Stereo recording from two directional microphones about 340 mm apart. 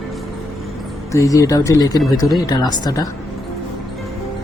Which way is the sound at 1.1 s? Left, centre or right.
Centre.